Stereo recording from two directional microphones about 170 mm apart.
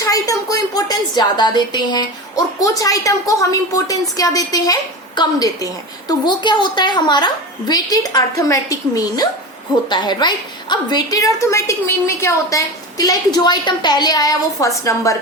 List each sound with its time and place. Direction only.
0.0 s a woman's voice: 20° left (ahead or behind)